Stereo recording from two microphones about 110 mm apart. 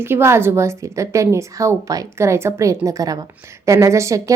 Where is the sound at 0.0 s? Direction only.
20° right (ahead or behind).